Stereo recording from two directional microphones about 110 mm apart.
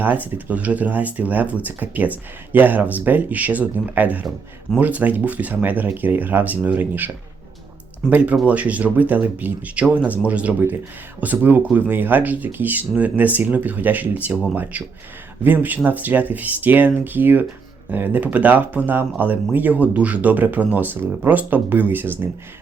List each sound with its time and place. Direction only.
0.0 s speech: 15° right (ahead or behind)
8.0 s speech: 5° left (ahead or behind)
8.4 s speech: 15° right (ahead or behind)